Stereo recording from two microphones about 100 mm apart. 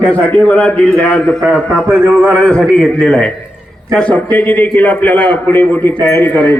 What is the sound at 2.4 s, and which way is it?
A man's voice, 10° left (ahead or behind).